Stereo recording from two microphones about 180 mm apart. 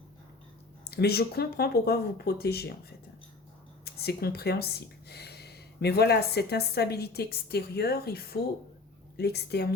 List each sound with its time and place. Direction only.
0.9 s speech: 60° left (ahead or behind)
3.8 s speech: 60° left (ahead or behind)